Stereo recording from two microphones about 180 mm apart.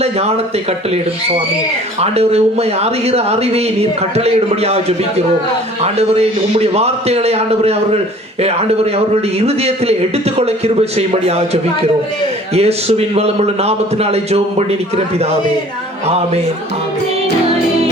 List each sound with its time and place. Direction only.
0.0 s a man's voice: 35° right (ahead or behind)
2.0 s a man's voice: 35° right (ahead or behind)